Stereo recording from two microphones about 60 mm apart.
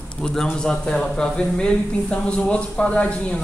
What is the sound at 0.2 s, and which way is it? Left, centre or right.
Speech, centre.